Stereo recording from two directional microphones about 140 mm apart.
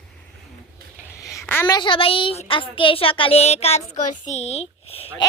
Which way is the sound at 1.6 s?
35° left (ahead or behind).